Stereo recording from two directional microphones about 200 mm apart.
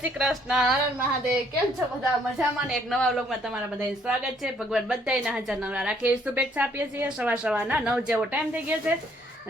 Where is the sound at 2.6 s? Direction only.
Centre (ahead or behind).